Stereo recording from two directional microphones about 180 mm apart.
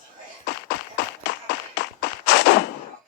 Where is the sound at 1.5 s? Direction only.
75° left (ahead or behind).